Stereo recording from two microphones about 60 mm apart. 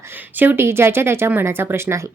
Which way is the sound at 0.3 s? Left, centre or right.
Right.